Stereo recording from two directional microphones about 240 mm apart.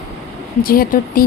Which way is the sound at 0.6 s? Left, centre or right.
Left.